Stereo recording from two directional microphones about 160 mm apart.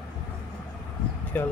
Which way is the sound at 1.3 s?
10° left (ahead or behind).